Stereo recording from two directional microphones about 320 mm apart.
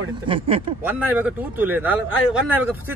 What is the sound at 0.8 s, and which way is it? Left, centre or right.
Speech, centre.